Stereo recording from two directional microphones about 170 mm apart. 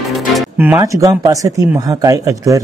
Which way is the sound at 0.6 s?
15° right (ahead or behind).